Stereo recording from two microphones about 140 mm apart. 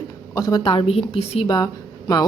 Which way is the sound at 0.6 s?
35° left (ahead or behind).